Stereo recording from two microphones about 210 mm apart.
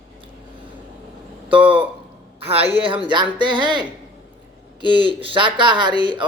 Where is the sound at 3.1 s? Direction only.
20° right (ahead or behind).